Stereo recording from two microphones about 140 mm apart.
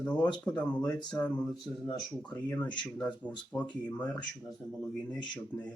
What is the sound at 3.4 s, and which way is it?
Speech, 10° left (ahead or behind).